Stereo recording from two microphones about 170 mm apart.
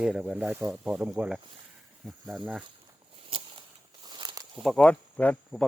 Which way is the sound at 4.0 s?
25° right (ahead or behind).